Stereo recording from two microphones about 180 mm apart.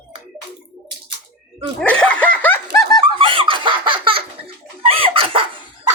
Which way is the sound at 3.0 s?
30° right (ahead or behind).